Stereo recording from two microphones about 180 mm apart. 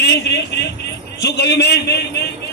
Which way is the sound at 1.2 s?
70° left (ahead or behind).